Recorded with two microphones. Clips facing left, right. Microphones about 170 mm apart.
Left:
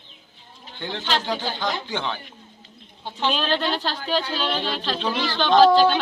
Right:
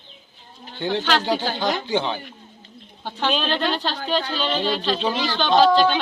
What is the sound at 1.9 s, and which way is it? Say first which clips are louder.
Speech: right 5 dB; 15° right (ahead or behind).